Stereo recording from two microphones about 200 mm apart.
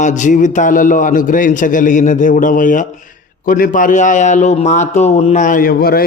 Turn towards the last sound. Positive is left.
turn(degrees=50)  # may be behind; listen again after turning